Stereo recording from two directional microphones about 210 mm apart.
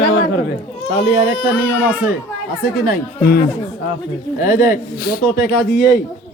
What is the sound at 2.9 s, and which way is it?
Speech, 45° left (ahead or behind).